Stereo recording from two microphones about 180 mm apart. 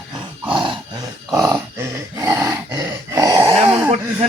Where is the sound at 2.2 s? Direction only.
15° right (ahead or behind).